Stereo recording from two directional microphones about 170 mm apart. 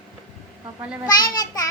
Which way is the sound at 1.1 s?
25° left (ahead or behind).